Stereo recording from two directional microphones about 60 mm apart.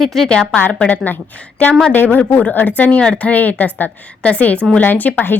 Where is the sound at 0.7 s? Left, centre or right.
Left.